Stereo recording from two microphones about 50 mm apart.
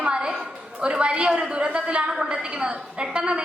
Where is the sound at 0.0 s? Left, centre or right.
Centre.